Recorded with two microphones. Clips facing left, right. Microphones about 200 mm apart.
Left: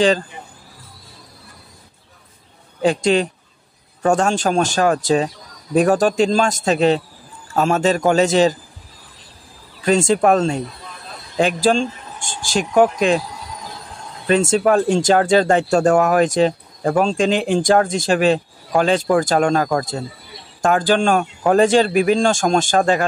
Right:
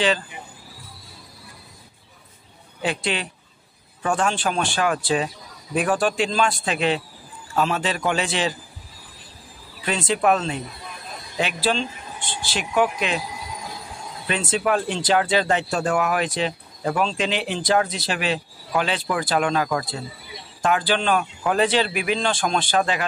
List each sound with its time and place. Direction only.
2.8 s speech: 45° left (ahead or behind)
9.8 s speech: 45° left (ahead or behind)
14.2 s speech: 45° left (ahead or behind)